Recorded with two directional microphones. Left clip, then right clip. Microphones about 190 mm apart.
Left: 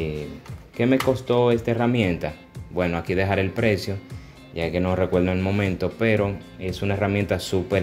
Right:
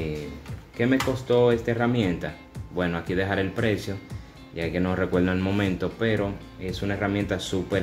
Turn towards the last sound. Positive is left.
turn(degrees=30)  # may be behind; listen again after turning